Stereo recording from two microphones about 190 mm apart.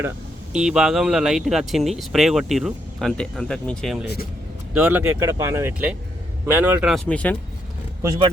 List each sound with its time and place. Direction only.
0.5 s speech: 5° right (ahead or behind)
8.0 s speech: 15° right (ahead or behind)